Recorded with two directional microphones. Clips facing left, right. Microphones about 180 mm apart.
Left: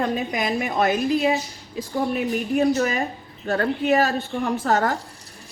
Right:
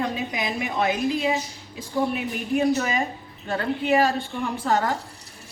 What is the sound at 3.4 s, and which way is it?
A woman's voice, 45° left (ahead or behind).